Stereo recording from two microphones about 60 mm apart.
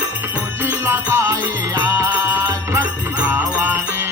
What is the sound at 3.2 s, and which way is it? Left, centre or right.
Music, right.